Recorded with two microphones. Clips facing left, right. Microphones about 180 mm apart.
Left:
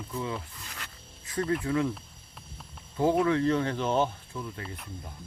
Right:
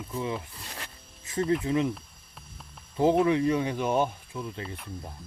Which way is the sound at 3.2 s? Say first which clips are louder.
Right 1 dB; 15° right (ahead or behind).